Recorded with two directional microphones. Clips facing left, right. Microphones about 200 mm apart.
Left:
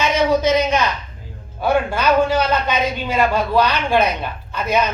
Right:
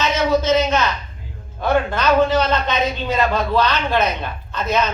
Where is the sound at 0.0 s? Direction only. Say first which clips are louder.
Left 2 dB; 15° left (ahead or behind).